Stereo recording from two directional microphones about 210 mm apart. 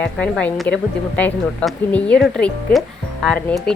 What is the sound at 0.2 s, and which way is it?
A woman's voice, 5° left (ahead or behind).